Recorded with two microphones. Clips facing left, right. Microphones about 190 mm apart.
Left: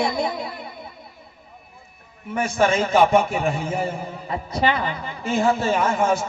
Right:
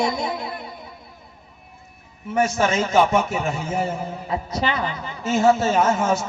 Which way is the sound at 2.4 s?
55° left (ahead or behind).